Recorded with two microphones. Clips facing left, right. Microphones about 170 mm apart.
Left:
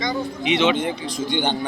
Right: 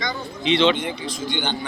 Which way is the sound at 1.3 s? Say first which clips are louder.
Left 4 dB; 50° left (ahead or behind).